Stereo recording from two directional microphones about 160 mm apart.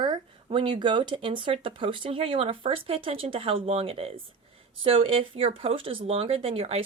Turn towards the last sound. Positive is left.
turn(degrees=-35)  # may be behind; listen again after turning